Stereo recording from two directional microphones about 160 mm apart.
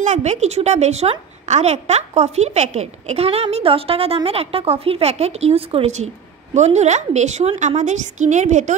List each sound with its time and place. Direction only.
0.0 s a woman's voice: 45° right (ahead or behind)